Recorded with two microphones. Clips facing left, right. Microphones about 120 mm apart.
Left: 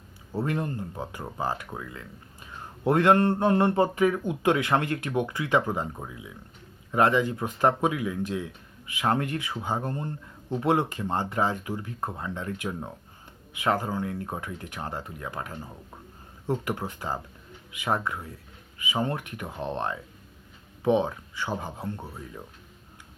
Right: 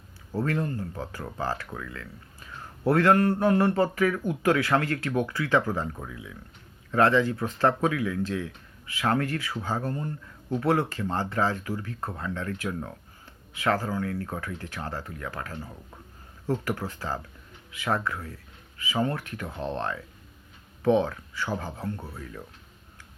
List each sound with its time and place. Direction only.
0.3 s speech: 20° left (ahead or behind)